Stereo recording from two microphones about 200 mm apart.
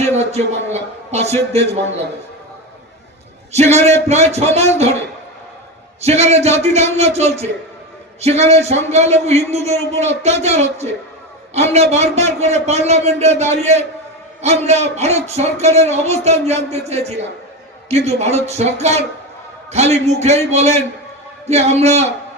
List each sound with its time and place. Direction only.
0.0 s a man's voice: 35° right (ahead or behind)
3.5 s a man's voice: 35° right (ahead or behind)
6.0 s a man's voice: 35° right (ahead or behind)